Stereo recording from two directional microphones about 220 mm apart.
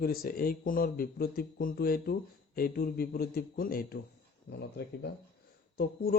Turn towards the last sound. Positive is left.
turn(degrees=45)  # may be behind; listen again after turning